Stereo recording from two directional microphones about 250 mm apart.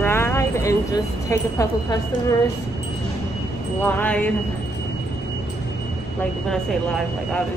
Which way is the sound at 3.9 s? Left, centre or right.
Centre.